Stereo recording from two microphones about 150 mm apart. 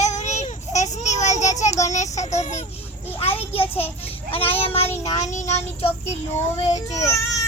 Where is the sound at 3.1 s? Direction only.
40° left (ahead or behind).